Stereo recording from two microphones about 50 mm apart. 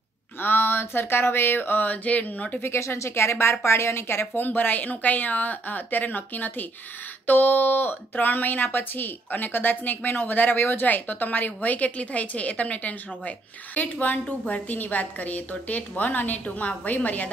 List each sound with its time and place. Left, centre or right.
0.4 s a sound: left
2.6 s speech: left
4.3 s speech: left